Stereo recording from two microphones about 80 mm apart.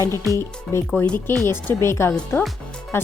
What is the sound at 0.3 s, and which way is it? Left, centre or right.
Speech, left.